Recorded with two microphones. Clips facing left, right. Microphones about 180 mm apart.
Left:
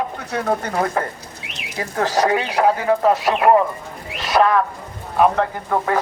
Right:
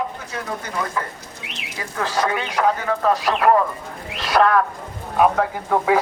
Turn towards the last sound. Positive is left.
turn(degrees=-5)  # may be behind; listen again after turning